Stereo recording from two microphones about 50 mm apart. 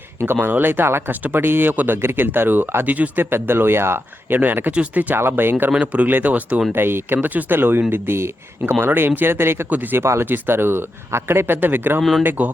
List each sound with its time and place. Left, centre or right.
0.5 s speech: right
2.0 s speech: right
2.8 s speech: right
3.2 s speech: right
4.4 s speech: right
4.7 s speech: right
5.1 s speech: right
5.7 s speech: right
6.7 s speech: right
8.9 s speech: right
9.6 s speech: right
10.0 s speech: right
10.2 s speech: right